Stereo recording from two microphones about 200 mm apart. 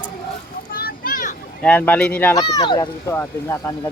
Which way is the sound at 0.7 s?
45° left (ahead or behind).